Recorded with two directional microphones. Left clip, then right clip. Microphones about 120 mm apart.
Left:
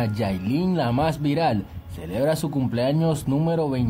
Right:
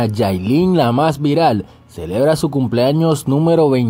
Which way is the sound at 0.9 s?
40° right (ahead or behind).